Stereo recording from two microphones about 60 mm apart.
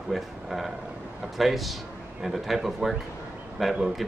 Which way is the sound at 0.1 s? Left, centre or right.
Centre.